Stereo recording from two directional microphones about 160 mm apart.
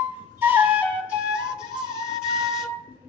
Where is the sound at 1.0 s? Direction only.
5° right (ahead or behind).